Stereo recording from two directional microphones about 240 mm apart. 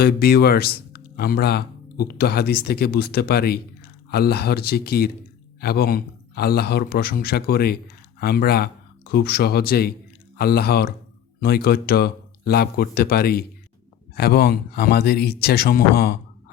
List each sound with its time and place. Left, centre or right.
0.0 s speech: left